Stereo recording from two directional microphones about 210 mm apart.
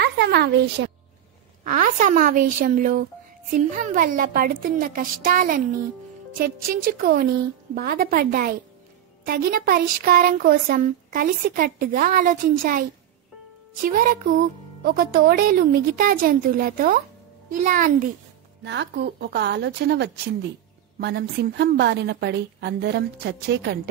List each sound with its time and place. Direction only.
0.0 s a sound: 50° right (ahead or behind)
1.6 s a woman's voice: 40° right (ahead or behind)
13.8 s a woman's voice: 40° right (ahead or behind)
18.6 s a woman's voice: 55° right (ahead or behind)